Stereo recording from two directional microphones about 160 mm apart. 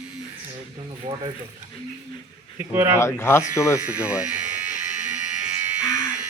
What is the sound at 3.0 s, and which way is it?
Speech, 15° left (ahead or behind).